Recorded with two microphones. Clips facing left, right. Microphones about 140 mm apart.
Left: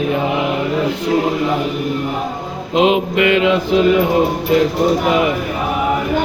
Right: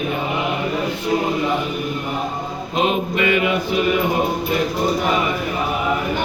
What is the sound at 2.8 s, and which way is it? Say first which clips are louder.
Mantra: left 6 dB; 90° left.